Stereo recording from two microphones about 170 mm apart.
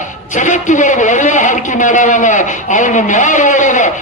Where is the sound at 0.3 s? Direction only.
45° left (ahead or behind).